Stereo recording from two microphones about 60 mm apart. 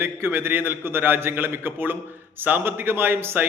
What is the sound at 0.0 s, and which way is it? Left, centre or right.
A man's voice, right.